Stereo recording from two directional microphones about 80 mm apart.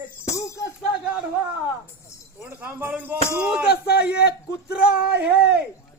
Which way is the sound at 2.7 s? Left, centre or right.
Right.